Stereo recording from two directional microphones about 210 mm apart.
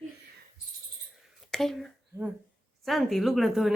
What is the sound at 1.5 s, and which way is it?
A woman's voice, centre (ahead or behind).